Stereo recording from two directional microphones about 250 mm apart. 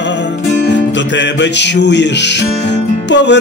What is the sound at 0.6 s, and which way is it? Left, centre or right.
Music, left.